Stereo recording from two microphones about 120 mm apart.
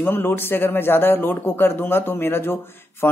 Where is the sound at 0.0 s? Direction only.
15° left (ahead or behind).